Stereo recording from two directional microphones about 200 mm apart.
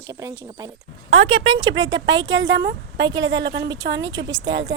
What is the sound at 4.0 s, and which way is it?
Speech, 20° right (ahead or behind).